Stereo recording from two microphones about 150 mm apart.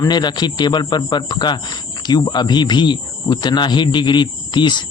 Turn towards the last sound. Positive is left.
turn(degrees=30)  # may be behind; listen again after turning